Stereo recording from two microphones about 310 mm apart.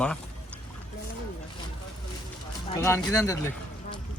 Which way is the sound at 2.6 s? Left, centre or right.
Centre.